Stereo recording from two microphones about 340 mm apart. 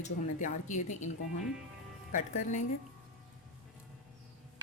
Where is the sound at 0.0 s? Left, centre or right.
Left.